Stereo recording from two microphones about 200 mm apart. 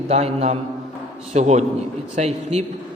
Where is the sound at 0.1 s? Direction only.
30° right (ahead or behind).